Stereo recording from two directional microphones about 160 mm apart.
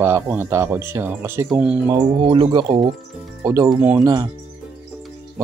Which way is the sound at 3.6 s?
10° right (ahead or behind).